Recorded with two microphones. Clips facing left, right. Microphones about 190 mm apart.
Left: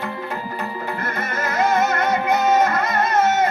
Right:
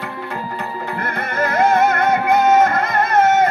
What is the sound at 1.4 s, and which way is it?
Music, 55° right (ahead or behind).